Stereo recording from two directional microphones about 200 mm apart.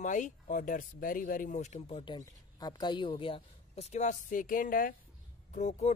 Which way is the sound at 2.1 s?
20° left (ahead or behind).